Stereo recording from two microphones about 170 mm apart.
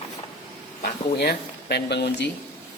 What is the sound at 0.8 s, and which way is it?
Speech, 65° left (ahead or behind).